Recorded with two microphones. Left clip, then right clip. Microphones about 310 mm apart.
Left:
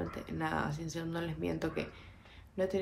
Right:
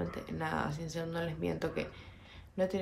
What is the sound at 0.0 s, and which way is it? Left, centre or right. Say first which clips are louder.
Speech: even; centre.